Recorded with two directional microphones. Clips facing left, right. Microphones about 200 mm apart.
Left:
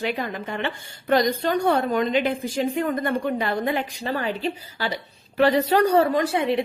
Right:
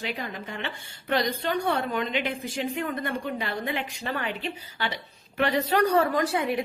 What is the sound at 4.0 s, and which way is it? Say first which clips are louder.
A woman's voice: left 5 dB; 35° left (ahead or behind).